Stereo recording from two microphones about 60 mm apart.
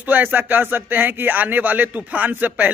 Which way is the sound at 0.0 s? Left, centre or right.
Right.